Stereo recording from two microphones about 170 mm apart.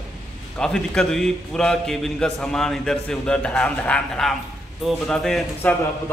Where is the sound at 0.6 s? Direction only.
Centre (ahead or behind).